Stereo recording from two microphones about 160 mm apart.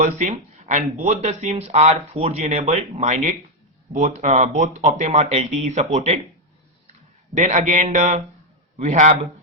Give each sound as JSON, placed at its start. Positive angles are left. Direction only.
{"t": 0.0, "sound": "speech", "side_deg": -50}
{"t": 7.3, "sound": "speech", "side_deg": -50}